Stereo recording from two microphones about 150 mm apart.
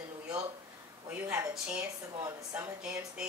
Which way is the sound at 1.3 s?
5° right (ahead or behind).